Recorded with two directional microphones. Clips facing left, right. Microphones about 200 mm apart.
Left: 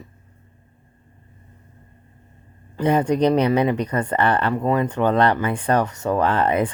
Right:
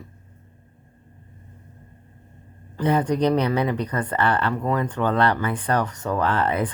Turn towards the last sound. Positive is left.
turn(degrees=15)  # may be behind; listen again after turning